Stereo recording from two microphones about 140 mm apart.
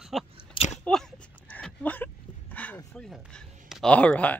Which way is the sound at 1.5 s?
10° left (ahead or behind).